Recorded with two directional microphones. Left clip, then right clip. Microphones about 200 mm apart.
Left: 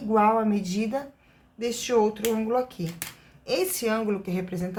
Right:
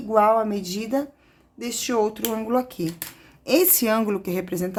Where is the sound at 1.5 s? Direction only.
50° right (ahead or behind).